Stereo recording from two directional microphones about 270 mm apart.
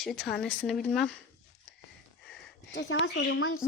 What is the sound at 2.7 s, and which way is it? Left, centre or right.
Speech, left.